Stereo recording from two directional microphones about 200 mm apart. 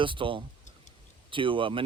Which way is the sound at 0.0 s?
25° right (ahead or behind).